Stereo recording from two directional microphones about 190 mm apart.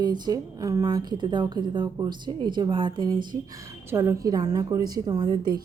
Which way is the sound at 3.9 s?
15° right (ahead or behind).